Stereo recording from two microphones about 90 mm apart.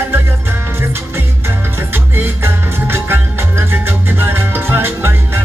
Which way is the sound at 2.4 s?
25° right (ahead or behind).